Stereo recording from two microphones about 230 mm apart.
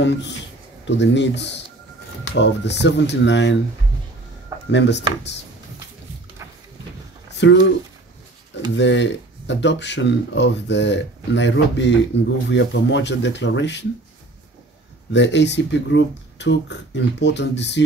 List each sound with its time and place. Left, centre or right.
0.0 s speech: left
4.6 s speech: left
7.2 s a sound: left
8.7 s speech: left
15.1 s speech: left